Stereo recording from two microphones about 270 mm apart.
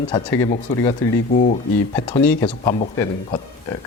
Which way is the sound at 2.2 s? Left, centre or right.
Centre.